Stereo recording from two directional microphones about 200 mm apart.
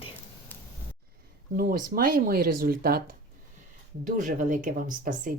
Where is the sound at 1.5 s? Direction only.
45° right (ahead or behind).